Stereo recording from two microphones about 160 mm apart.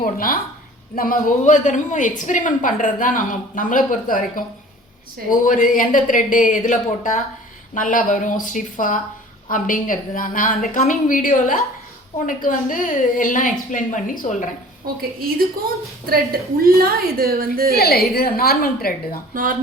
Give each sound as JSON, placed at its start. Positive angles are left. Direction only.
{"t": 0.0, "sound": "a woman's voice", "side_deg": 65}
{"t": 16.0, "sound": "a woman's voice", "side_deg": -70}
{"t": 17.7, "sound": "a woman's voice", "side_deg": 75}
{"t": 19.3, "sound": "speech", "side_deg": -60}